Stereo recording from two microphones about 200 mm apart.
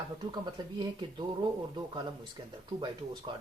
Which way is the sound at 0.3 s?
25° right (ahead or behind).